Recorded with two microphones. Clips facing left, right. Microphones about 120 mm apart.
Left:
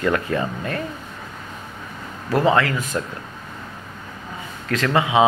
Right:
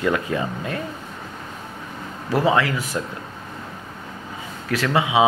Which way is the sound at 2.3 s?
15° right (ahead or behind).